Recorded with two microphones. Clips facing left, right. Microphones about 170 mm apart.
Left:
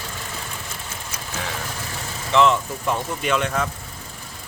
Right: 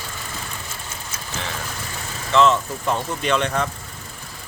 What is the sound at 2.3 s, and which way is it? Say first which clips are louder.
Speech: right 1 dB; 15° left (ahead or behind).